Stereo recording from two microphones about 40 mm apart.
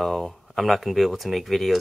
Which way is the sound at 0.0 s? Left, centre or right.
Centre.